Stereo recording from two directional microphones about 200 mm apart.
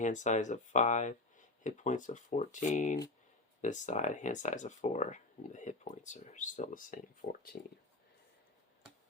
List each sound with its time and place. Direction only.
0.0 s speech: 40° left (ahead or behind)